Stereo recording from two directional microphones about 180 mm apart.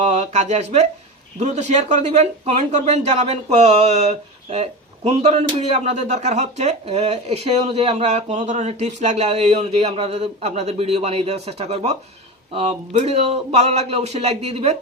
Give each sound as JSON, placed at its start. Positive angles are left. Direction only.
{"t": 0.0, "sound": "speech", "side_deg": -40}